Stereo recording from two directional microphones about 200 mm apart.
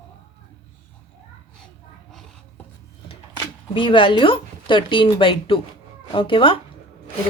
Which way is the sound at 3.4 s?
25° left (ahead or behind).